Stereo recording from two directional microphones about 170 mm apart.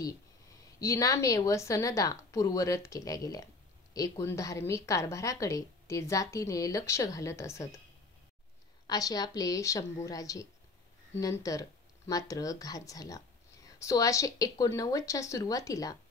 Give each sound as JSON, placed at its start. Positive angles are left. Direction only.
{"t": 0.7, "sound": "a woman's voice", "side_deg": 20}
{"t": 8.8, "sound": "a woman's voice", "side_deg": 20}